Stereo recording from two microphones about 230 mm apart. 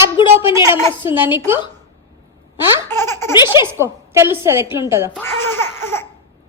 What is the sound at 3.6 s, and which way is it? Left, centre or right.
A woman's voice, centre.